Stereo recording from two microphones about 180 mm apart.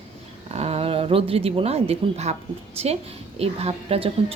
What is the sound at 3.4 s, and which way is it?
Speech, 35° right (ahead or behind).